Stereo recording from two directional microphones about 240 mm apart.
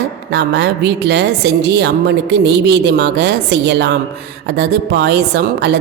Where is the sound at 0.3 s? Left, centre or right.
Right.